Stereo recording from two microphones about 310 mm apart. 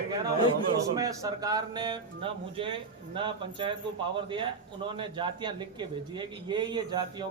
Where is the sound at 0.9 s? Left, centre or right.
Centre.